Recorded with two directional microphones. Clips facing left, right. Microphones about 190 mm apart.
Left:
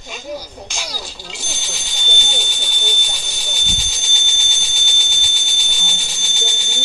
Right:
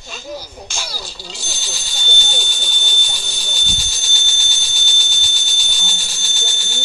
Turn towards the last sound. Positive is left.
turn(degrees=20)  # may be behind; listen again after turning